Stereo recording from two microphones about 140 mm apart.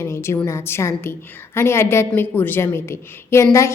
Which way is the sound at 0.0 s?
20° left (ahead or behind).